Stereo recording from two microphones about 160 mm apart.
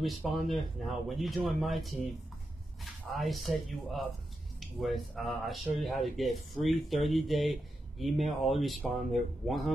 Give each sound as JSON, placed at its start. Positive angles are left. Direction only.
{"t": 0.0, "sound": "speech", "side_deg": 0}